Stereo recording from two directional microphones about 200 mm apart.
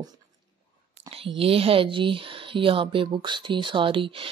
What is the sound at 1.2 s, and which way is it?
Speech, 25° right (ahead or behind).